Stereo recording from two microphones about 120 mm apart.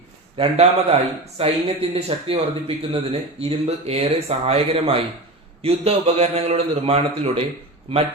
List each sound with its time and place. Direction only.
0.5 s speech: 60° right (ahead or behind)